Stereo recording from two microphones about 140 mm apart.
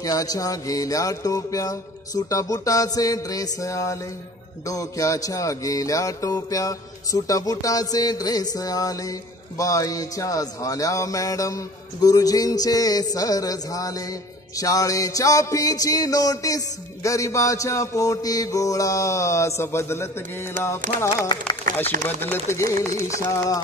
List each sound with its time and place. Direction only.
0.0 s music: 25° left (ahead or behind)
22.2 s music: 15° left (ahead or behind)